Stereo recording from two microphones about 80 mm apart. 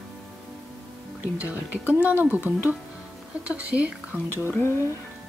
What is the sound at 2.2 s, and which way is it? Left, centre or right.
Speech, right.